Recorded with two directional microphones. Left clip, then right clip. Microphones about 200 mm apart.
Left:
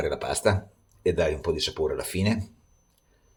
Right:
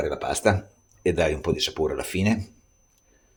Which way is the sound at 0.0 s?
5° right (ahead or behind).